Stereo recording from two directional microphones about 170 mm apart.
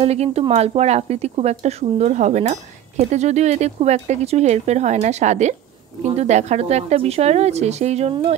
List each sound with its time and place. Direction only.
0.0 s speech: 40° right (ahead or behind)